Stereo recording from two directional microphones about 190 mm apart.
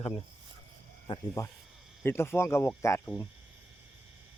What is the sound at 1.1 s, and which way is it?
Speech, 20° left (ahead or behind).